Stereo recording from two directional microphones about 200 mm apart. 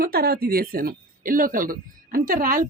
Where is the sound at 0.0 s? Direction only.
50° right (ahead or behind).